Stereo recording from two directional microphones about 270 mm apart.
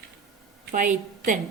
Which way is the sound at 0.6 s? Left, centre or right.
Right.